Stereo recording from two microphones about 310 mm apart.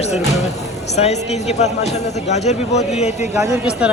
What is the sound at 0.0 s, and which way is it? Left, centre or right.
Music, left.